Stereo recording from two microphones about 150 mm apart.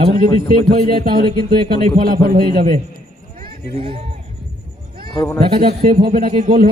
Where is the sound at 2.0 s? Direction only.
80° right.